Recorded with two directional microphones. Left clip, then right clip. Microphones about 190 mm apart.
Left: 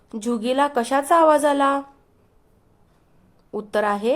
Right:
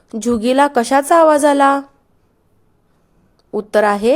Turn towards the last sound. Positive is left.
turn(degrees=-25)  # may be behind; listen again after turning